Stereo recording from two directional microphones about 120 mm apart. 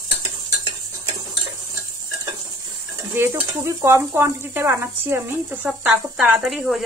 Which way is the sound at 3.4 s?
25° right (ahead or behind).